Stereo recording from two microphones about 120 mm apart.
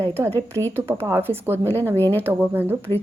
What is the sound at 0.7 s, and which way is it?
Speech, 20° right (ahead or behind).